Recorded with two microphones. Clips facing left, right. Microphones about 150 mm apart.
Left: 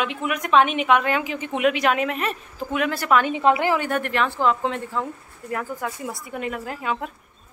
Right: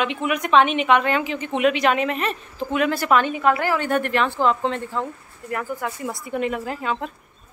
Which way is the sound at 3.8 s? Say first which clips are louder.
Right 2 dB; centre (ahead or behind).